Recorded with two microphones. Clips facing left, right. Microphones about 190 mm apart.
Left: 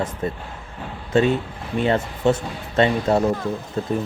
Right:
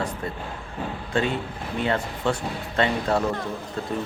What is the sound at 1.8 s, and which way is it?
Speech, 20° left (ahead or behind).